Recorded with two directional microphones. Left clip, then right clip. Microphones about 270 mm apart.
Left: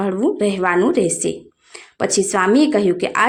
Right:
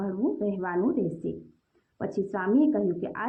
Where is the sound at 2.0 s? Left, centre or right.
Left.